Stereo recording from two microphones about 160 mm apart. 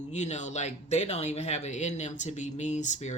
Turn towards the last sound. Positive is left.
turn(degrees=45)  # may be behind; listen again after turning